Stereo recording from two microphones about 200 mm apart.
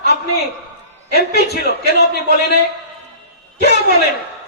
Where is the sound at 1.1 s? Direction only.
55° left (ahead or behind).